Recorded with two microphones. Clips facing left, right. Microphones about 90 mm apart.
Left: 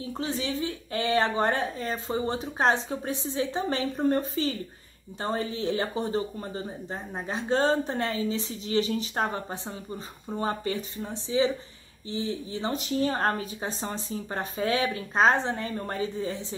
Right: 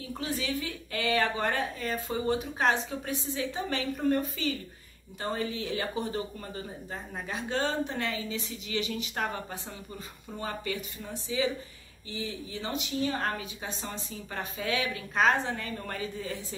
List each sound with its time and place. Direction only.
0.0 s speech: 30° left (ahead or behind)